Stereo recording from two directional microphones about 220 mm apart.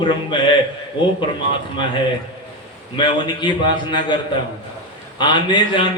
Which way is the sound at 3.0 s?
20° left (ahead or behind).